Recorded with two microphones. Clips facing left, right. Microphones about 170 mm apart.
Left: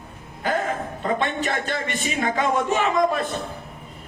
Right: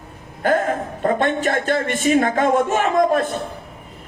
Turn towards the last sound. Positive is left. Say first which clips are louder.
# right 4 dB
turn(degrees=-50)  # may be behind; listen again after turning